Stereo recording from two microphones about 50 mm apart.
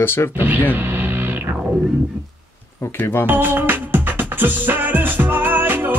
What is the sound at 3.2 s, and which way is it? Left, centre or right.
Music, right.